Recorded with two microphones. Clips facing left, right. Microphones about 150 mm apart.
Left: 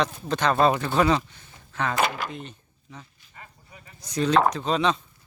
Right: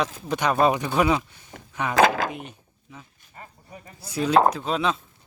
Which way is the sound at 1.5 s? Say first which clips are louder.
Right 12 dB; 70° right (ahead or behind).